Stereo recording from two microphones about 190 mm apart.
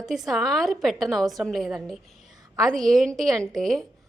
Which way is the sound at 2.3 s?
20° right (ahead or behind).